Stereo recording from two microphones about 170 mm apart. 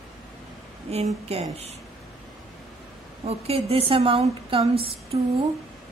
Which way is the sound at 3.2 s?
35° right (ahead or behind).